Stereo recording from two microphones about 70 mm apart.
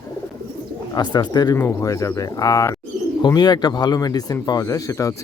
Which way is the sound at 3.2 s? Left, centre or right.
Left.